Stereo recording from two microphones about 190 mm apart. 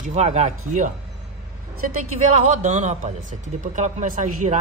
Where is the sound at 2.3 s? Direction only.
40° right (ahead or behind).